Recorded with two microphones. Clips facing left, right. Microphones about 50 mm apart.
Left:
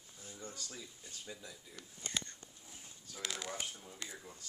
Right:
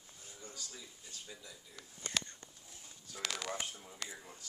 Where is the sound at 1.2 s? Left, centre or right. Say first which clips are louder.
Left 3 dB; centre.